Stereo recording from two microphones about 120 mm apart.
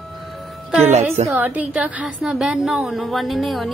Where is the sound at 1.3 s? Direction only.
15° right (ahead or behind).